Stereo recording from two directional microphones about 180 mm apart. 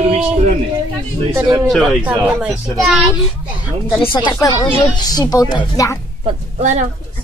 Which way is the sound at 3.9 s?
25° left (ahead or behind).